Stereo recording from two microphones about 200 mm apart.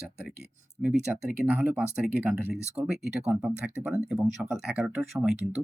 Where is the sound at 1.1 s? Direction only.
10° right (ahead or behind).